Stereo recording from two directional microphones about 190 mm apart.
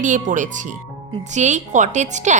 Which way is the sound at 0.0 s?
40° right (ahead or behind).